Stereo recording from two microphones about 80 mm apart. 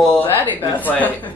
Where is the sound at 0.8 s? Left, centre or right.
Left.